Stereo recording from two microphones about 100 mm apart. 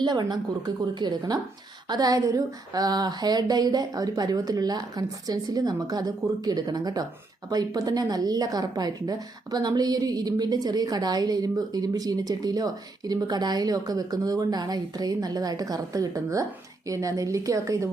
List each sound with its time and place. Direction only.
0.0 s a woman's voice: 45° right (ahead or behind)